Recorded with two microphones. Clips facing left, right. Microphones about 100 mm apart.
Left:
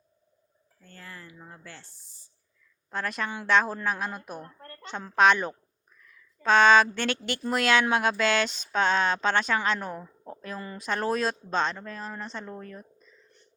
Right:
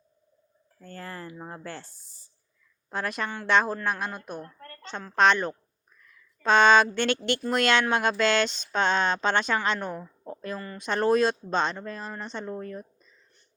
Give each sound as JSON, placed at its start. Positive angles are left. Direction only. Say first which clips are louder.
{"t": 0.8, "sound": "speech", "louder": "right 7 dB", "side_deg": -50}
{"t": 2.9, "sound": "speech", "louder": "right 1 dB", "side_deg": -5}
{"t": 4.4, "sound": "a sound", "louder": "even", "side_deg": 15}
{"t": 5.0, "sound": "a woman's voice", "louder": "even", "side_deg": 10}
{"t": 6.0, "sound": "a sound", "louder": "right 2 dB", "side_deg": 0}
{"t": 7.4, "sound": "a woman's voice", "louder": "left 1 dB", "side_deg": 5}